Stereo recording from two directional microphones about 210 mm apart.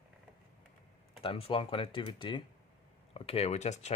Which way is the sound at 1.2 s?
25° left (ahead or behind).